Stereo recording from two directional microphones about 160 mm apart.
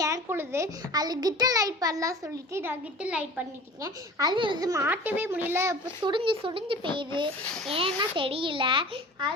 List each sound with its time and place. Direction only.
0.0 s a child's voice: 15° right (ahead or behind)
3.8 s a child's voice: 25° right (ahead or behind)
6.0 s a child's voice: 30° right (ahead or behind)